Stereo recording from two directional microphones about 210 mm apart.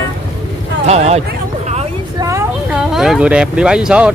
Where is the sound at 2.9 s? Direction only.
Centre (ahead or behind).